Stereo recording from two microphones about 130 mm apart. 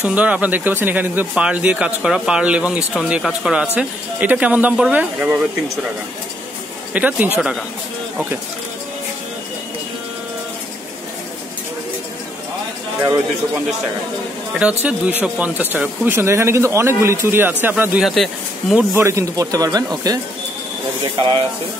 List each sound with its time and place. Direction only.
0.0 s speech: 10° right (ahead or behind)
6.9 s speech: 10° right (ahead or behind)
14.5 s speech: 10° right (ahead or behind)
18.0 s speech: centre (ahead or behind)
18.8 s speech: 20° right (ahead or behind); by 21.5 s 35° right (ahead or behind)